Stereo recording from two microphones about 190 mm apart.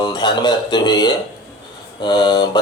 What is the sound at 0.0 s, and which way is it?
Speech, 25° left (ahead or behind).